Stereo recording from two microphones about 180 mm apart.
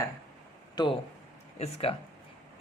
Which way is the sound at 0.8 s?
25° left (ahead or behind).